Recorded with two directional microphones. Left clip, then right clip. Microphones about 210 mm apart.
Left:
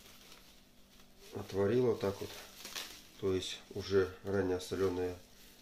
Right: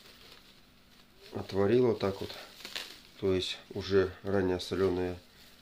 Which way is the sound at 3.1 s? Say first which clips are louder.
Right 5 dB; 50° right (ahead or behind).